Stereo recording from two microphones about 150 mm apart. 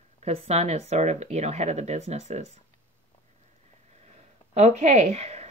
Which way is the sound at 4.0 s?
45° right (ahead or behind).